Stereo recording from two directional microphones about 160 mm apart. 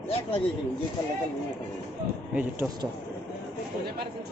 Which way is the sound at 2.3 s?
10° right (ahead or behind).